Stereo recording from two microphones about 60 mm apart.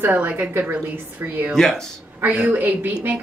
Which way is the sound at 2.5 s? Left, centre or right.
Right.